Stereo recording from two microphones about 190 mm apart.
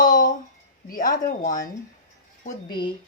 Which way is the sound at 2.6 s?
25° left (ahead or behind).